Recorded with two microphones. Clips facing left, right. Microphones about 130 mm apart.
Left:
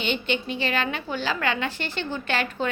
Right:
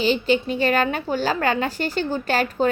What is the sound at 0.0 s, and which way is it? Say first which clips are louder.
A woman's voice: right 7 dB; 35° right (ahead or behind).